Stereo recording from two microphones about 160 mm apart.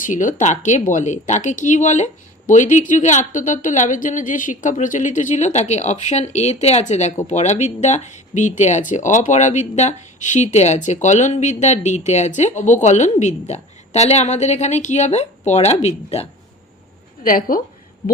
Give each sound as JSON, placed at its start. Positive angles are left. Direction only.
{"t": 0.0, "sound": "speech", "side_deg": 55}
{"t": 17.2, "sound": "a woman's voice", "side_deg": 60}